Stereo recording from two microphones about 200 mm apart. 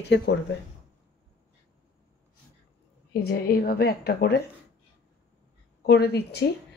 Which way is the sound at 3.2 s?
50° left (ahead or behind).